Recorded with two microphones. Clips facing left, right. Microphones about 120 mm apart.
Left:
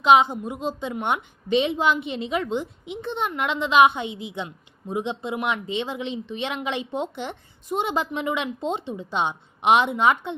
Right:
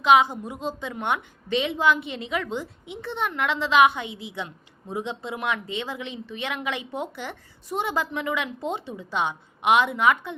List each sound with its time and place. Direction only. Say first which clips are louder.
0.0 s a woman's voice: left 1 dB; 20° left (ahead or behind)